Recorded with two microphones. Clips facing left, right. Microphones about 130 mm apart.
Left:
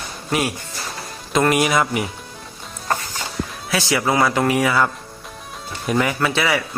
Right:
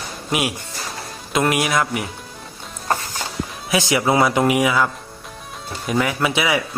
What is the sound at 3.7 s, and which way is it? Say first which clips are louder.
A man's voice: right 2 dB; 20° right (ahead or behind).